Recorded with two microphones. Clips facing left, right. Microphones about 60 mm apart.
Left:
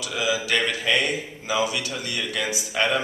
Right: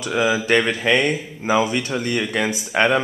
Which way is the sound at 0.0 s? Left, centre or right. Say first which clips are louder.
Right 6 dB; right.